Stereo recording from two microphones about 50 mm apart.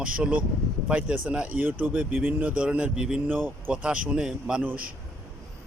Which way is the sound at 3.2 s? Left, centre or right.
Right.